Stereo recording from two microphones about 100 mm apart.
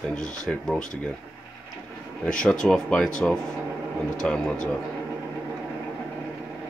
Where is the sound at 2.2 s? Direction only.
10° left (ahead or behind).